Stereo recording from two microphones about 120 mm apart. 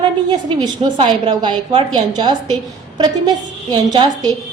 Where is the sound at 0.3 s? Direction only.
35° right (ahead or behind).